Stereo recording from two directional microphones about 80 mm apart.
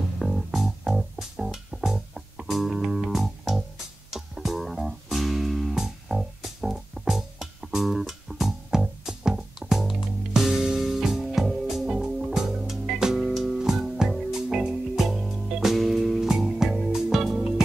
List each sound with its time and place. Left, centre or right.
0.2 s music: centre